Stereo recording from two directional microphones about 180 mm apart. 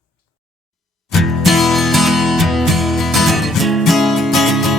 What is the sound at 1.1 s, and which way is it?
Music, centre (ahead or behind).